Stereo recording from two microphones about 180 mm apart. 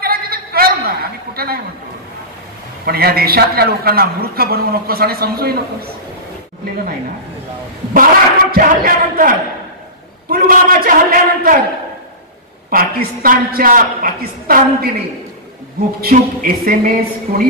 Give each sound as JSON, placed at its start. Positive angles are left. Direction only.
{"t": 0.0, "sound": "a sound", "side_deg": -55}
{"t": 2.8, "sound": "a man's voice", "side_deg": -60}
{"t": 7.9, "sound": "a sound", "side_deg": -50}
{"t": 10.3, "sound": "a woman's voice", "side_deg": -55}
{"t": 12.6, "sound": "a woman's voice", "side_deg": -55}
{"t": 16.0, "sound": "a man's voice", "side_deg": -55}